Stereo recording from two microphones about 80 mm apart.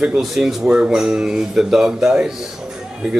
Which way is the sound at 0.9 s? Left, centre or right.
Centre.